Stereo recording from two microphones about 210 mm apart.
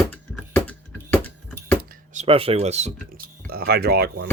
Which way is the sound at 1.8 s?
45° right (ahead or behind).